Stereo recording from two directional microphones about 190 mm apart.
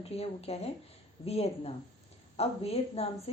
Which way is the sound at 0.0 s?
30° left (ahead or behind).